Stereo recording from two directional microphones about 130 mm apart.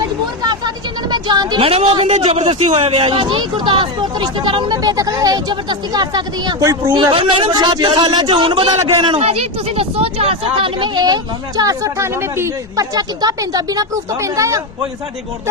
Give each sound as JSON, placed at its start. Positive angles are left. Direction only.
{"t": 1.1, "sound": "a woman's voice", "side_deg": -35}
{"t": 1.8, "sound": "speech", "side_deg": -50}
{"t": 6.9, "sound": "speech", "side_deg": -40}